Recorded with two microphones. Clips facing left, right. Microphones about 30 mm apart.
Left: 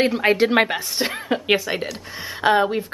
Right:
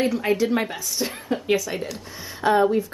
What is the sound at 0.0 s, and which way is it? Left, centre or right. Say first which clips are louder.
A woman's voice: left 4 dB; left.